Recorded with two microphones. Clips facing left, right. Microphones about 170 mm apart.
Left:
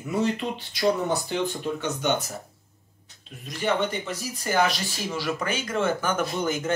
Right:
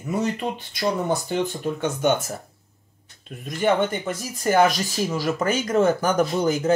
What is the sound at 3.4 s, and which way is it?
Speech, 50° right (ahead or behind).